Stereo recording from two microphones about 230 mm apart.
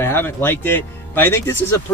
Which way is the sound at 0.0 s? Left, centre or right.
Centre.